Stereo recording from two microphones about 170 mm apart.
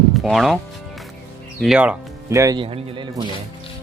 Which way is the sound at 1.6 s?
5° right (ahead or behind).